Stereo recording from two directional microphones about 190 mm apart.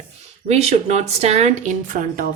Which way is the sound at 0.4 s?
35° right (ahead or behind).